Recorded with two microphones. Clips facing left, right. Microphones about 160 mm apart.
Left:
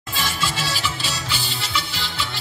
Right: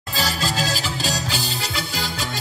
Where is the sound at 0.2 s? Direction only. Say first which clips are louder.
Right 3 dB; 40° right (ahead or behind).